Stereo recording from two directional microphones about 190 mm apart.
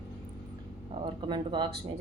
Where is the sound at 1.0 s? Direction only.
25° right (ahead or behind).